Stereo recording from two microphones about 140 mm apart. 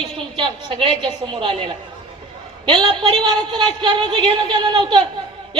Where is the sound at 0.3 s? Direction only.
40° right (ahead or behind).